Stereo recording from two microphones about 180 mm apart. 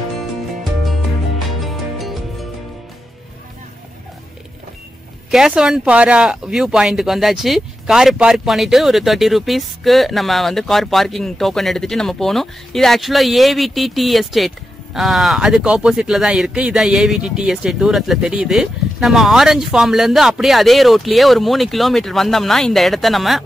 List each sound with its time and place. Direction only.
1.6 s music: centre (ahead or behind)
5.3 s speech: 5° right (ahead or behind)